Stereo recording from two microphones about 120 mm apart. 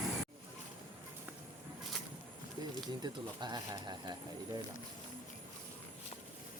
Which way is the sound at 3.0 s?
35° right (ahead or behind).